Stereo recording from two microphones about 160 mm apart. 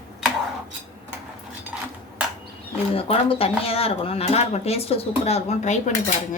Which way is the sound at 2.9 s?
35° left (ahead or behind).